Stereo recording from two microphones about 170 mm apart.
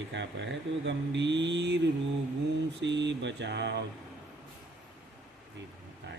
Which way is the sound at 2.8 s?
90° right.